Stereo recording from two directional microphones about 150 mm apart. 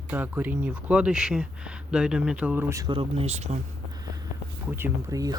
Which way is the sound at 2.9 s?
40° right (ahead or behind).